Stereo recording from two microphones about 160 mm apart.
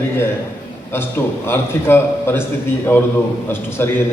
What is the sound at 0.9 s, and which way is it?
A man's voice, 15° left (ahead or behind).